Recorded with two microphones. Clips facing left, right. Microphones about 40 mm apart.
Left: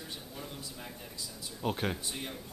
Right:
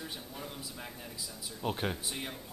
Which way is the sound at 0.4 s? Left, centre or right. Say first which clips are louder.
Even; centre.